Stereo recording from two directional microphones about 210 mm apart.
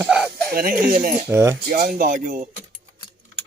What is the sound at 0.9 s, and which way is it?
Speech, 45° right (ahead or behind).